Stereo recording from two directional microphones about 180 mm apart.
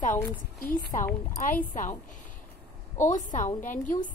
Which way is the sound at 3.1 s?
45° left (ahead or behind).